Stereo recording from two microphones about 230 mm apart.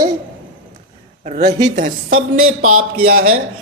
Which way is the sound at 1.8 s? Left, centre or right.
Right.